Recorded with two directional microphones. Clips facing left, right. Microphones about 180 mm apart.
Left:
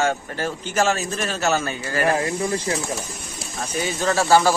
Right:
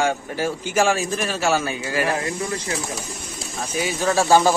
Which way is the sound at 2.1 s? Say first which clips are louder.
Left 3 dB; 25° left (ahead or behind).